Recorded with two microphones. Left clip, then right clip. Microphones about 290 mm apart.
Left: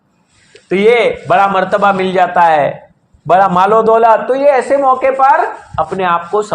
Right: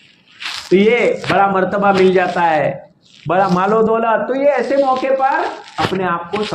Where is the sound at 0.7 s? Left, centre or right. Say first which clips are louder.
Left 3 dB; left.